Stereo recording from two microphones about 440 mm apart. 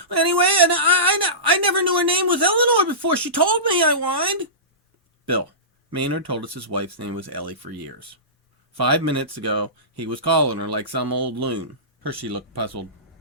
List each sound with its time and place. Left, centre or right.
0.0 s a sound: right
2.5 s speech: right
5.9 s speech: right
8.7 s speech: right